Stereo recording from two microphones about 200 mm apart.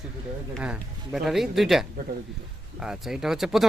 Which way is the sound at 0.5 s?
5° right (ahead or behind).